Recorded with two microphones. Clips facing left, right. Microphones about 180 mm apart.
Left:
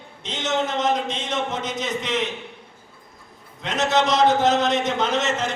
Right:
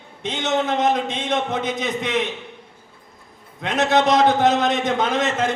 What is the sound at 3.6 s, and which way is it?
A man's voice, 55° right (ahead or behind).